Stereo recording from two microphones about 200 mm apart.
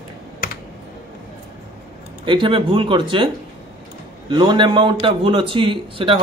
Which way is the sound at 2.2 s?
25° right (ahead or behind).